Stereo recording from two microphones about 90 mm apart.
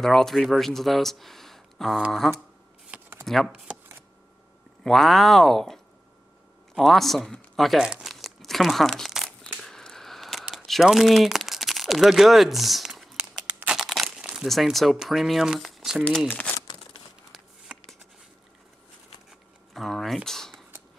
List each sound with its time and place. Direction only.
0.0 s speech: 5° left (ahead or behind)
2.9 s shuffling cards: 10° right (ahead or behind)
3.3 s speech: centre (ahead or behind)
4.8 s speech: centre (ahead or behind)
7.9 s crumpling: centre (ahead or behind)
9.7 s a sound: 5° left (ahead or behind)
13.7 s crumpling: centre (ahead or behind)
14.1 s speech: 5° right (ahead or behind)
16.3 s speech: 15° left (ahead or behind)
19.7 s typing: 5° left (ahead or behind)
20.2 s a sound: 5° left (ahead or behind)